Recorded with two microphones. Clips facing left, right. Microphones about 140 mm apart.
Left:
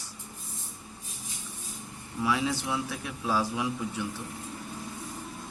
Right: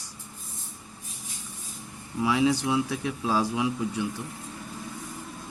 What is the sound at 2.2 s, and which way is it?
Speech, 15° right (ahead or behind).